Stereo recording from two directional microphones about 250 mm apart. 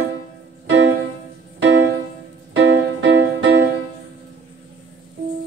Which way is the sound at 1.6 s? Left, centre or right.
Right.